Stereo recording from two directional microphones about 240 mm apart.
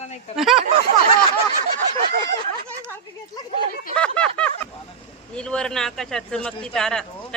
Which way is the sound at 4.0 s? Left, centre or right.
Centre.